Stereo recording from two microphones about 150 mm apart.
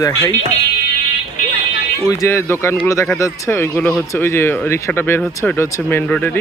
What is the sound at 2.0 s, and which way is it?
Speech, 20° left (ahead or behind).